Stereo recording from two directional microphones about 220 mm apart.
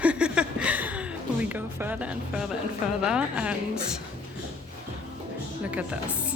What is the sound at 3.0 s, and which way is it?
Speech, 5° right (ahead or behind).